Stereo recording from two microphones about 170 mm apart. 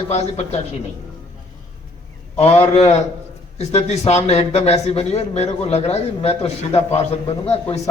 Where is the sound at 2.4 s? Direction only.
35° left (ahead or behind).